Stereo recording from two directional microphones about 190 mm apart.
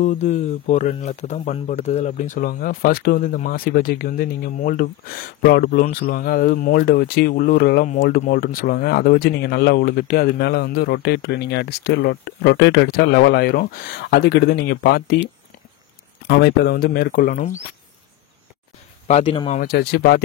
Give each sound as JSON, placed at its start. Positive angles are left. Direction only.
{"t": 0.0, "sound": "speech", "side_deg": 40}
{"t": 16.3, "sound": "speech", "side_deg": 60}
{"t": 19.0, "sound": "speech", "side_deg": 30}
{"t": 19.6, "sound": "speech", "side_deg": 60}